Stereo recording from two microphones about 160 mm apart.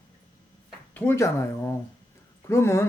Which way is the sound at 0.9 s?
15° left (ahead or behind).